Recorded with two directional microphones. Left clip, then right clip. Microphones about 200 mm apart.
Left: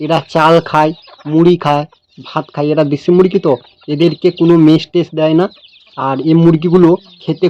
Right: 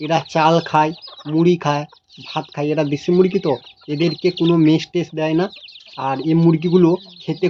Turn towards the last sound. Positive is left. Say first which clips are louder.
# left 6 dB
turn(degrees=30)  # may be behind; listen again after turning